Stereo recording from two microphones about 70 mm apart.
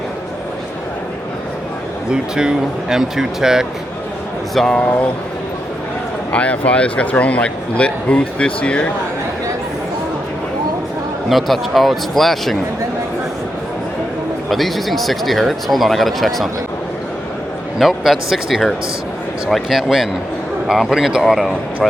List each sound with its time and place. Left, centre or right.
2.0 s speech: centre
4.5 s speech: centre
4.8 s speech: left
6.3 s speech: centre
11.3 s speech: centre
14.5 s speech: centre
17.7 s speech: centre